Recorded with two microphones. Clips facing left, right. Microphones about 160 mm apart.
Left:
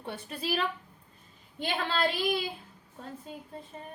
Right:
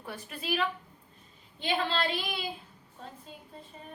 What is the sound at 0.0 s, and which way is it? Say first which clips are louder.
Speech: left 3 dB; 30° left (ahead or behind).